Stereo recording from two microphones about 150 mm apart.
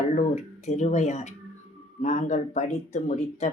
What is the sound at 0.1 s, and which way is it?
Speech, 50° left (ahead or behind).